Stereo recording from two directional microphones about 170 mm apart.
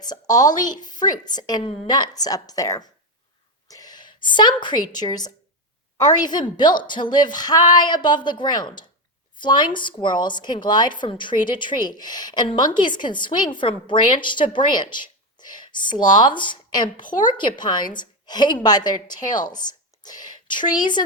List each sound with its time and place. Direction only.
0.0 s a woman's voice: 25° left (ahead or behind)